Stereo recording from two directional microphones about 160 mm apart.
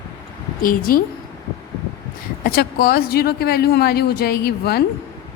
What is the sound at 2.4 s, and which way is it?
Speech, 70° left (ahead or behind).